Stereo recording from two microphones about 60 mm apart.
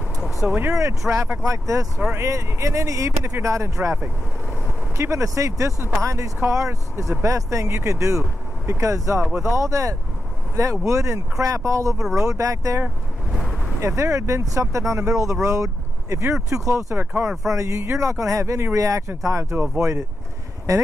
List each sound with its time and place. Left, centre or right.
0.2 s vehicle: centre
0.7 s speech: right
4.9 s speech: right
13.3 s vehicle: centre
13.7 s speech: right
18.8 s speech: right
19.5 s speech: right
19.8 s speech: right